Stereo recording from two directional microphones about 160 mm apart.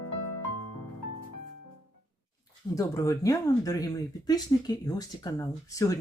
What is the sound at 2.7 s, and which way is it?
Speech, 20° left (ahead or behind).